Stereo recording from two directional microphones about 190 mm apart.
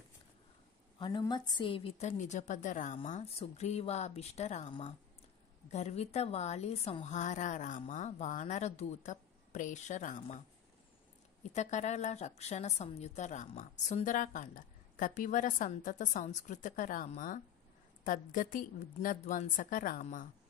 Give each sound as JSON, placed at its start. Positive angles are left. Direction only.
{"t": 0.9, "sound": "a woman's voice", "side_deg": 25}
{"t": 11.5, "sound": "a woman's voice", "side_deg": 35}